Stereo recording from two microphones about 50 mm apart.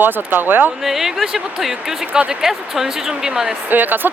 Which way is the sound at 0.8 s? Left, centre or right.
Centre.